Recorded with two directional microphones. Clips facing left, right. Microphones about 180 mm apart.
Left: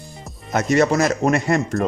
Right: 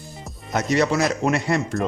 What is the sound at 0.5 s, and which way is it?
Speech, 50° left (ahead or behind).